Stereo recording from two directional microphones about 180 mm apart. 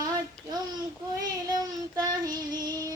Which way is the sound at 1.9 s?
20° right (ahead or behind).